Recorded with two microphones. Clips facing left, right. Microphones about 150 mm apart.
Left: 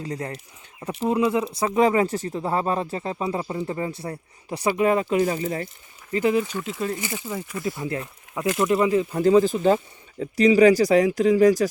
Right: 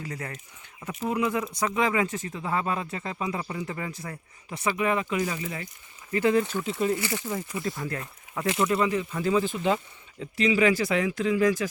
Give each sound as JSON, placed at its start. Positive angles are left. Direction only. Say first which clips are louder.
{"t": 0.0, "sound": "speech", "louder": "left 6 dB", "side_deg": 30}
{"t": 6.1, "sound": "speech", "louder": "left 2 dB", "side_deg": 20}
{"t": 6.5, "sound": "speech", "louder": "right 1 dB", "side_deg": 0}
{"t": 6.9, "sound": "speech", "louder": "right 1 dB", "side_deg": 20}
{"t": 8.9, "sound": "speech", "louder": "left 8 dB", "side_deg": 35}